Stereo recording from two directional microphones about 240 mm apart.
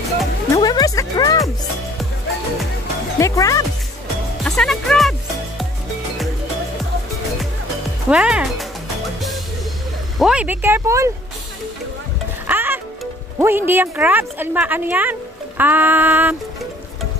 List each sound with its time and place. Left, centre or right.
0.6 s music: centre
3.2 s speech: centre
4.5 s music: centre
8.1 s speech: centre
10.1 s speech: centre
12.4 s speech: centre